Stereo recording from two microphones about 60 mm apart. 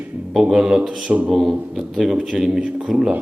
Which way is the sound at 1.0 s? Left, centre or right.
Right.